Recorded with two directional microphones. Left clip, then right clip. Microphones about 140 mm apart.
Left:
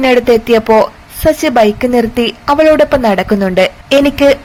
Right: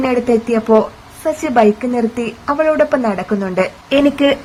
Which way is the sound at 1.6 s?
20° left (ahead or behind).